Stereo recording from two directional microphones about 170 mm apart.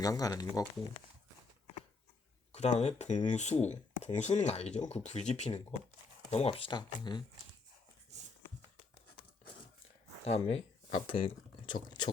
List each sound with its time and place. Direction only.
0.0 s speech: 20° left (ahead or behind)
2.5 s speech: 40° left (ahead or behind)
10.2 s speech: 35° left (ahead or behind)